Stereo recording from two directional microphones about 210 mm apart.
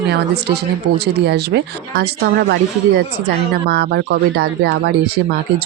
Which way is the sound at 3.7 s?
50° right (ahead or behind).